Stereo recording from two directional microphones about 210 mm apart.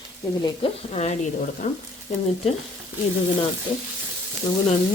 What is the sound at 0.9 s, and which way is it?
Sizzle, 30° left (ahead or behind).